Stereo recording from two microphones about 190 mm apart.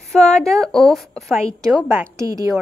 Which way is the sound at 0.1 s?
5° left (ahead or behind).